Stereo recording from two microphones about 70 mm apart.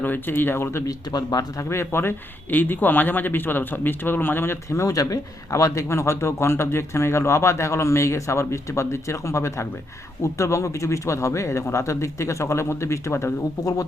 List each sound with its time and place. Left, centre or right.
0.0 s speech: left
0.9 s speech: left
1.7 s speech: left
4.7 s speech: left